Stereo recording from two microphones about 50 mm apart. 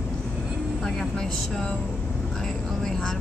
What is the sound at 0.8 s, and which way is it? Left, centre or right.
Speech, centre.